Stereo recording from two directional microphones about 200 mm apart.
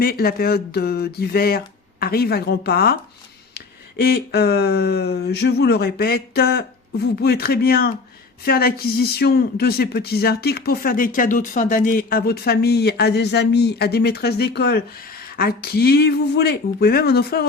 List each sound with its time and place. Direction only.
0.0 s speech: 50° left (ahead or behind)
4.0 s speech: 55° left (ahead or behind)